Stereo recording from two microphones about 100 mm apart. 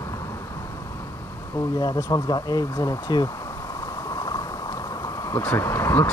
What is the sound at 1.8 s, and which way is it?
Speech, 40° left (ahead or behind).